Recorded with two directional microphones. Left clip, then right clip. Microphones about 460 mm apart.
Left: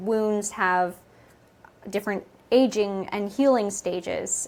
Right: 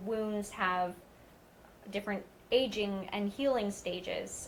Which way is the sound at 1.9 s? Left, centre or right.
Left.